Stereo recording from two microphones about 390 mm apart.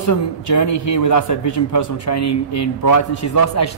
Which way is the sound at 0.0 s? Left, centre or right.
Left.